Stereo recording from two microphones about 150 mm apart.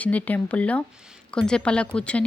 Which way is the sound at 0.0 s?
10° left (ahead or behind).